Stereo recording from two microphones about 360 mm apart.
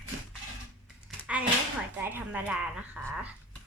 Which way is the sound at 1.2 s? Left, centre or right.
Centre.